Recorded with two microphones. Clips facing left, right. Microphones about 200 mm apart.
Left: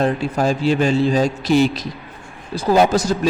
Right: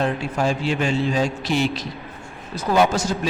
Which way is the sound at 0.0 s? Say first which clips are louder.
Left 4 dB; 40° left (ahead or behind).